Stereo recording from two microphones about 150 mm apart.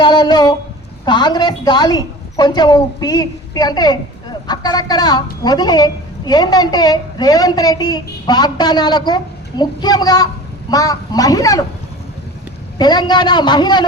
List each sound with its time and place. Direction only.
0.0 s a woman's voice: 30° left (ahead or behind)
12.8 s a woman's voice: 30° left (ahead or behind)